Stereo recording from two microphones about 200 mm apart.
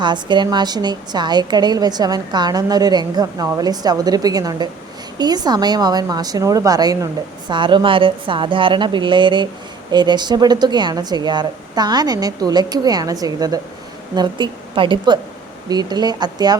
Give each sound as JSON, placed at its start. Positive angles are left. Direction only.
{"t": 0.0, "sound": "a woman's voice", "side_deg": -20}